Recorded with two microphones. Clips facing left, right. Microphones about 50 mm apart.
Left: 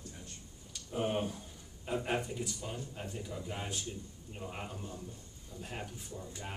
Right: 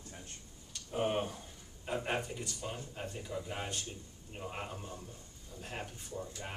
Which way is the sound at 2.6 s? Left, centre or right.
Centre.